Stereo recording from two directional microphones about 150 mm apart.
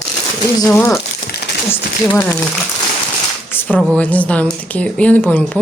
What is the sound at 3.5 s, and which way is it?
Speech, 10° left (ahead or behind).